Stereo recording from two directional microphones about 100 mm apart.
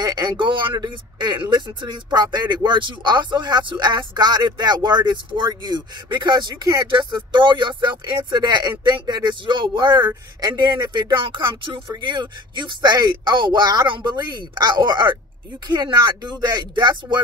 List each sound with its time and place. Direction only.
0.0 s speech: 45° right (ahead or behind)